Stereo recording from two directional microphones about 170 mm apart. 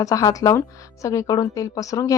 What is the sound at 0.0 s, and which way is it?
A woman's voice, 20° left (ahead or behind).